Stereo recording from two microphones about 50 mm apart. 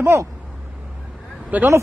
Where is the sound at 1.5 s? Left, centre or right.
Right.